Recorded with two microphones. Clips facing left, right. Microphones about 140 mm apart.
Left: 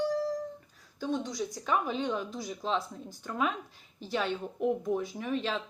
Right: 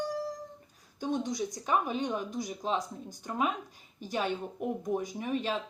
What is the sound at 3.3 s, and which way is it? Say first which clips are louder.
A woman's voice: even; 45° right (ahead or behind).